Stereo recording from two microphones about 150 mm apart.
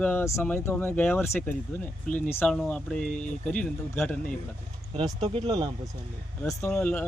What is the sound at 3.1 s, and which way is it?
Speech, 55° left (ahead or behind).